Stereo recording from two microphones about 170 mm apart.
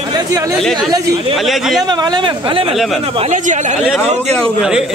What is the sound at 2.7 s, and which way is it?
Speech, centre (ahead or behind).